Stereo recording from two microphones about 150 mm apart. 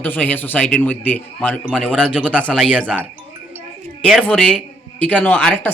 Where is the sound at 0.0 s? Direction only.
10° left (ahead or behind).